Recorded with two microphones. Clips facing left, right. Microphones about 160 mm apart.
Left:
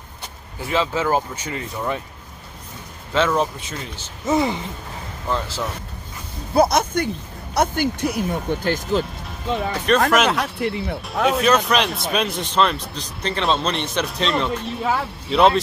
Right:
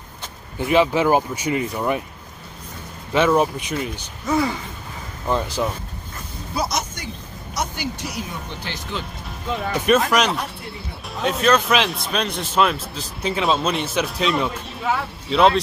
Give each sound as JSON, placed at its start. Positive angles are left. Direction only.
{"t": 0.6, "sound": "speech", "side_deg": -15}
{"t": 3.1, "sound": "speech", "side_deg": -10}
{"t": 4.3, "sound": "speech", "side_deg": 20}
{"t": 5.3, "sound": "speech", "side_deg": -15}
{"t": 6.5, "sound": "speech", "side_deg": 55}
{"t": 9.6, "sound": "speech", "side_deg": 0}
{"t": 10.3, "sound": "speech", "side_deg": 80}
{"t": 11.2, "sound": "speech", "side_deg": 0}
{"t": 14.8, "sound": "speech", "side_deg": 30}
{"t": 15.2, "sound": "speech", "side_deg": 0}